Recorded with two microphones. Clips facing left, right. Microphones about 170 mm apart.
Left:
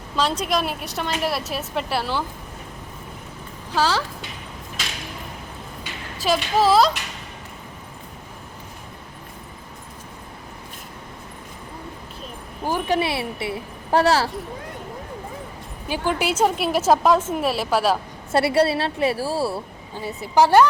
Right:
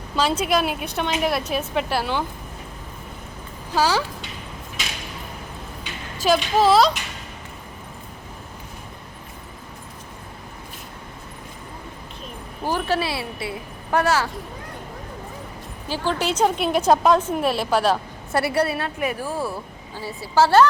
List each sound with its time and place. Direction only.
0.2 s a woman's voice: centre (ahead or behind)
3.8 s speech: 10° right (ahead or behind)
6.1 s a woman's voice: centre (ahead or behind)
12.6 s a woman's voice: 15° left (ahead or behind); by 14.3 s 35° left (ahead or behind)
15.9 s a woman's voice: 10° left (ahead or behind)
18.3 s a woman's voice: 25° left (ahead or behind)